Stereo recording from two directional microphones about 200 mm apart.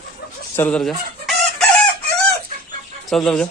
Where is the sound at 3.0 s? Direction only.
5° left (ahead or behind).